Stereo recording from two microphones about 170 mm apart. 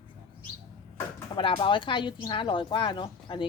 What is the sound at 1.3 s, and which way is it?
Speech, 30° left (ahead or behind).